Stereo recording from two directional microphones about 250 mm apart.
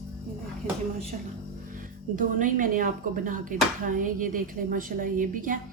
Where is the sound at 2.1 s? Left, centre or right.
Right.